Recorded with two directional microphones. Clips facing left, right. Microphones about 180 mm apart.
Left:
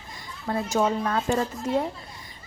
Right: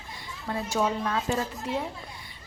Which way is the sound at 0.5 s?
45° left (ahead or behind).